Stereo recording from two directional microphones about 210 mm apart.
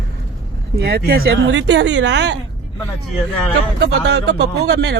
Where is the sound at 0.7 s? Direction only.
50° right (ahead or behind).